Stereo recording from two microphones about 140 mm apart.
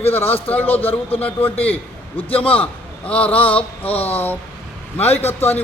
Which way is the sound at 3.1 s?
10° left (ahead or behind).